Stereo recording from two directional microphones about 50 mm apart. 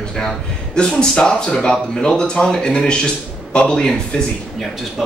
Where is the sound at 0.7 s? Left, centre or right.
Centre.